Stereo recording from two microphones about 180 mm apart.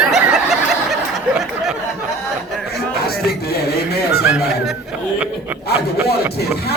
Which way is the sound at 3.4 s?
60° left (ahead or behind).